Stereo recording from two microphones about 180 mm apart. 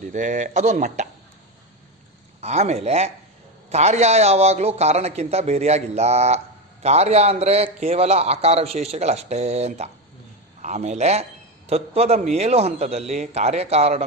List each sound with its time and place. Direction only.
0.0 s speech: 45° right (ahead or behind)
2.4 s a man's voice: 35° right (ahead or behind)